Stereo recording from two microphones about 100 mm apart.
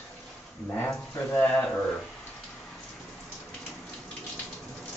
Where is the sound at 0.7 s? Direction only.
20° left (ahead or behind).